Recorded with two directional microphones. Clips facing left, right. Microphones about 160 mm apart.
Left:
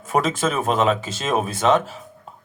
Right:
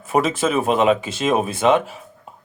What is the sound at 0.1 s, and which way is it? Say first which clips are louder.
Speech: right 2 dB; 10° right (ahead or behind).